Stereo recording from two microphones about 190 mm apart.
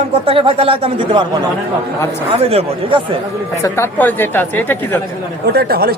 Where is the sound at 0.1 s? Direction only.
30° right (ahead or behind).